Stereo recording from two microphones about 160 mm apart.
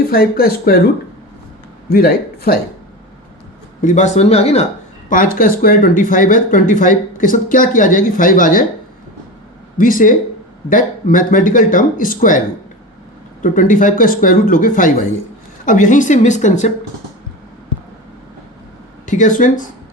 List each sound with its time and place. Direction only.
0.1 s speech: 70° left (ahead or behind)
1.9 s a man's voice: 70° left (ahead or behind)
3.8 s speech: 50° left (ahead or behind)
5.0 s speech: 60° left (ahead or behind)
9.7 s speech: 60° left (ahead or behind)
13.4 s speech: 55° left (ahead or behind)
19.0 s speech: 50° left (ahead or behind)